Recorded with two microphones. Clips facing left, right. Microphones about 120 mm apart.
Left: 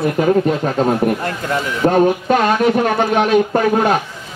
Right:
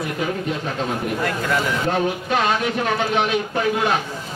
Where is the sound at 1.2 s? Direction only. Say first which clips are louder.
Left 1 dB; 35° left (ahead or behind).